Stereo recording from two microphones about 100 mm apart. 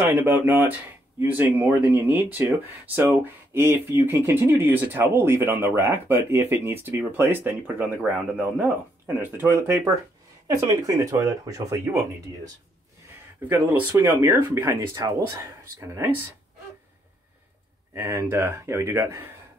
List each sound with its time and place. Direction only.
0.1 s speech: 20° right (ahead or behind)
13.5 s speech: 25° right (ahead or behind)
15.0 s speech: 35° right (ahead or behind)
17.9 s speech: 30° right (ahead or behind)